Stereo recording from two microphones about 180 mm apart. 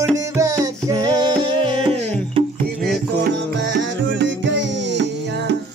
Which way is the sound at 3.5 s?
80° right.